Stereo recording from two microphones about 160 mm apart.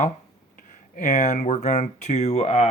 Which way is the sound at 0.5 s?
55° left (ahead or behind).